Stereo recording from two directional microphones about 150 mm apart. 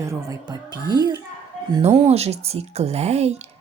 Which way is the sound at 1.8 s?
45° right (ahead or behind).